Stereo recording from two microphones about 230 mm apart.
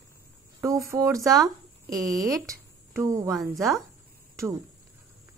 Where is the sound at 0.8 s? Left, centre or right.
Centre.